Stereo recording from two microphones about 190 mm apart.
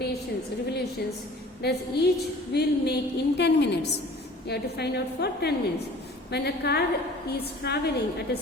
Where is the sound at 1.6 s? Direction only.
60° left (ahead or behind).